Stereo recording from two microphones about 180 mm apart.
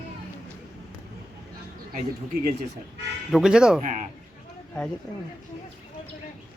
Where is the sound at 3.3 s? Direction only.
Centre (ahead or behind).